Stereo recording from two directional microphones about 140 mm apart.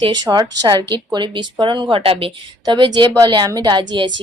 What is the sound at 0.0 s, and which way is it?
A woman's voice, 30° right (ahead or behind).